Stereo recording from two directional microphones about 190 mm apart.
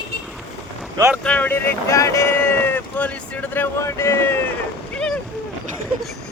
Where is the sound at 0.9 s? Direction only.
15° right (ahead or behind).